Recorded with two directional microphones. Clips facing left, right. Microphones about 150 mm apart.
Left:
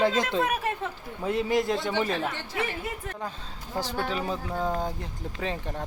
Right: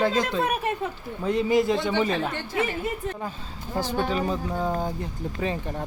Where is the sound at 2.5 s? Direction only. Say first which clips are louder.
Right 8 dB; 25° right (ahead or behind).